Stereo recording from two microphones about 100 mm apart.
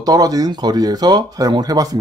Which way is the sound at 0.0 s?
40° right (ahead or behind).